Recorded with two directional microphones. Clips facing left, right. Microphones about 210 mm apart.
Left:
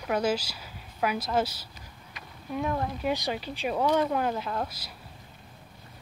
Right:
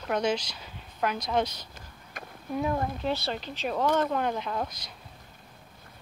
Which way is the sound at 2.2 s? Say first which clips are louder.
Right 6 dB; 50° right (ahead or behind).